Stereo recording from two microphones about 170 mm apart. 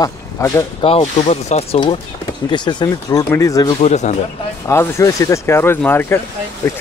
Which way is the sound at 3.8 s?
40° left (ahead or behind).